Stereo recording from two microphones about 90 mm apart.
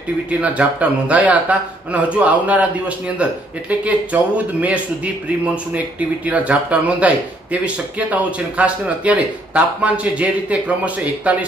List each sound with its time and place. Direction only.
0.3 s a man's voice: 15° right (ahead or behind)
3.8 s a man's voice: 15° right (ahead or behind)